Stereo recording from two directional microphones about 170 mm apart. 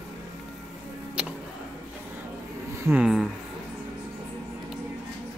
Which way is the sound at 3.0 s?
Centre (ahead or behind).